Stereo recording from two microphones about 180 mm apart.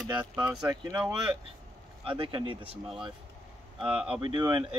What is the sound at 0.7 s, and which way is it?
Speech, 20° right (ahead or behind).